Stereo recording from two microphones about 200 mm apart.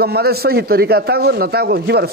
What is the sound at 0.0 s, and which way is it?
Speech, 50° right (ahead or behind).